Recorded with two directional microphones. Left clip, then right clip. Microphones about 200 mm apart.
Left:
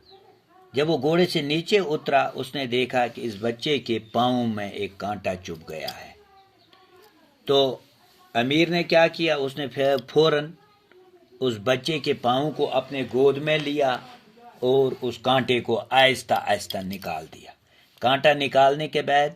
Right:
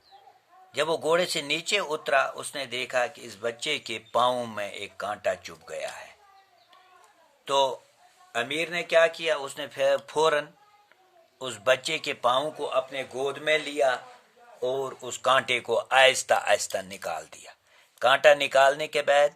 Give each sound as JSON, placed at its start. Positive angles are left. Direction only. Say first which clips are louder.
{"t": 0.7, "sound": "speech", "louder": "left 2 dB", "side_deg": -20}
{"t": 7.4, "sound": "speech", "louder": "left 3 dB", "side_deg": -10}
{"t": 8.3, "sound": "speech", "louder": "left 7 dB", "side_deg": 5}
{"t": 12.7, "sound": "speech", "louder": "left 4 dB", "side_deg": 0}
{"t": 14.8, "sound": "speech", "louder": "left 2 dB", "side_deg": -15}